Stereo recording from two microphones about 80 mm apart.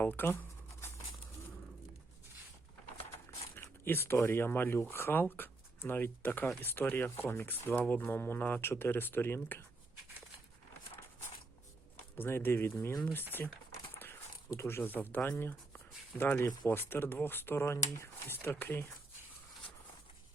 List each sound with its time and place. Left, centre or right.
0.0 s speech: left
3.5 s speech: left
12.1 s speech: left
13.9 s a sound: left
14.5 s speech: left
16.6 s speech: left